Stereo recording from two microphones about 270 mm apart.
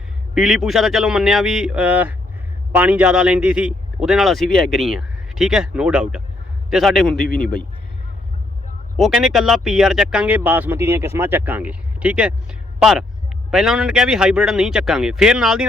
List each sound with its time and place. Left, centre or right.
0.3 s speech: centre
9.0 s speech: centre